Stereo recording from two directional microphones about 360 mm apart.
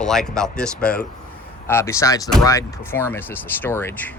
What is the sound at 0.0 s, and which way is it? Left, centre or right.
Speech, centre.